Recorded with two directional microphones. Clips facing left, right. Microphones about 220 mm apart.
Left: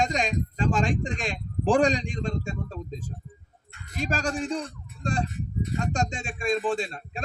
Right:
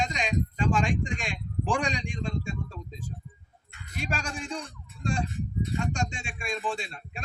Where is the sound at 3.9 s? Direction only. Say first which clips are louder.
Left 6 dB; 40° left (ahead or behind).